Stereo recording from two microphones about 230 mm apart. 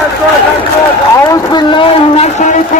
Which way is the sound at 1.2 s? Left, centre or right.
Centre.